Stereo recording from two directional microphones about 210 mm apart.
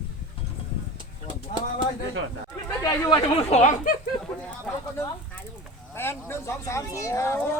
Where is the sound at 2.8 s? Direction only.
15° left (ahead or behind).